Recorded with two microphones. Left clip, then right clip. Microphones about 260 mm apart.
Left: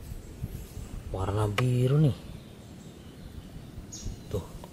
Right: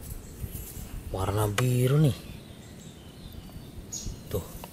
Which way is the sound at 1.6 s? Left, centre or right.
Centre.